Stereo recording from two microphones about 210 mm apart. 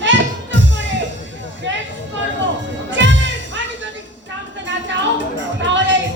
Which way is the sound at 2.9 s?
60° right (ahead or behind).